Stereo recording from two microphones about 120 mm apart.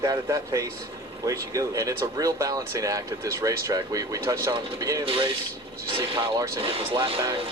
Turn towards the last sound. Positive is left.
turn(degrees=-50)  # may be behind; listen again after turning